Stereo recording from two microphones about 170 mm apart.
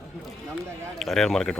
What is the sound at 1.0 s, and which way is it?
Speech, centre (ahead or behind).